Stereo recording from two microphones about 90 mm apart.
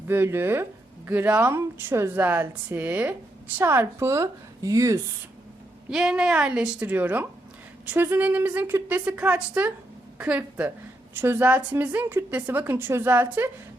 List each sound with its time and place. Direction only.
0.1 s a woman's voice: 25° right (ahead or behind)
5.9 s a woman's voice: 5° right (ahead or behind)
11.1 s speech: 25° right (ahead or behind)